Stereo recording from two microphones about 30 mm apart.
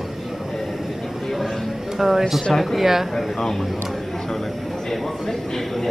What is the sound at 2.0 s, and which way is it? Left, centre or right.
Speech, centre.